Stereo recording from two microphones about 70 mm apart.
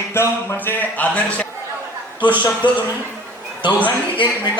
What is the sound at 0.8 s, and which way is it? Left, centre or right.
Speech, left.